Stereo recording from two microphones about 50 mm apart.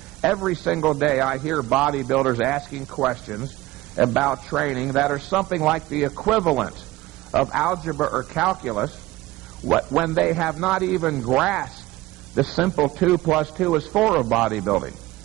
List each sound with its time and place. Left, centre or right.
0.2 s a man's voice: centre